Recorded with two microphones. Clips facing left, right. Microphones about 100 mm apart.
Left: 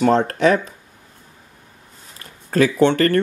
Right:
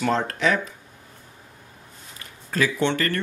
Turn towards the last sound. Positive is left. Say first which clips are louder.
# left 8 dB
turn(degrees=45)  # may be behind; listen again after turning